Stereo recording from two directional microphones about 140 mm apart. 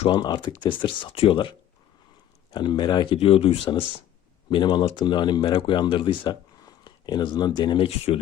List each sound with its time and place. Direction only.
0.1 s speech: 30° left (ahead or behind)